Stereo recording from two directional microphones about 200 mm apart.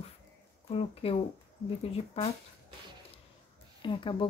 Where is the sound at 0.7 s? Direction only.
30° left (ahead or behind).